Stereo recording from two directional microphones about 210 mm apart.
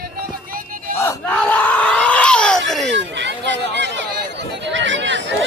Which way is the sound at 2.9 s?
60° right (ahead or behind).